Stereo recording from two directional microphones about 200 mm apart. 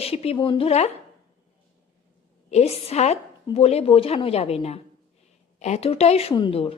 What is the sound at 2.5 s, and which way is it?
A woman's voice, 30° left (ahead or behind).